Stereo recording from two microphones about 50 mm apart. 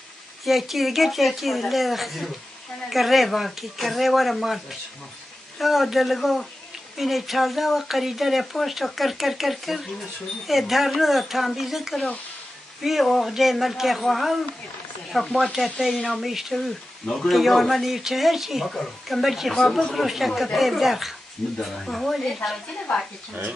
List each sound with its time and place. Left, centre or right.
0.5 s speech: centre
16.3 s speech: centre
17.0 s speech: centre
22.9 s a woman's voice: centre